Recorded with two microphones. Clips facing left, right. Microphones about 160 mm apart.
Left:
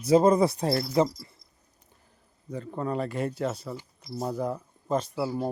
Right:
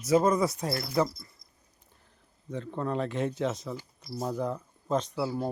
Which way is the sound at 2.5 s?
5° left (ahead or behind).